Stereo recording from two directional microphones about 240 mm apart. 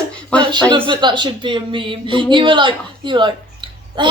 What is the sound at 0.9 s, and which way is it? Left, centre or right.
A woman's voice, centre.